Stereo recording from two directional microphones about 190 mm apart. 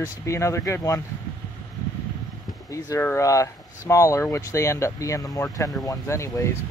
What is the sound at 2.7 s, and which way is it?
Speech, 15° left (ahead or behind).